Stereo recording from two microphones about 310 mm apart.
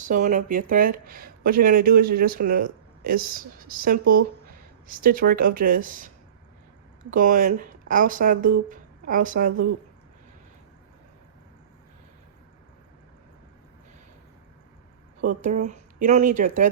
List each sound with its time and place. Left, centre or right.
0.0 s speech: right
7.1 s speech: right
15.4 s speech: right